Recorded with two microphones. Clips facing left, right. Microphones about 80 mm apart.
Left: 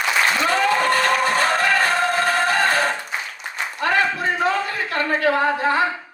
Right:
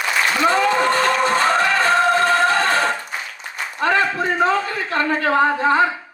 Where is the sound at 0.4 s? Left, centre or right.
Right.